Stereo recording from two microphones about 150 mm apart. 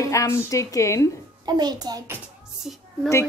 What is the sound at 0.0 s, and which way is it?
A woman's voice, 20° left (ahead or behind).